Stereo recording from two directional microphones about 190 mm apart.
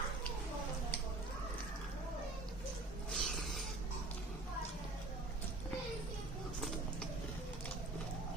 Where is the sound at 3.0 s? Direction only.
Centre (ahead or behind).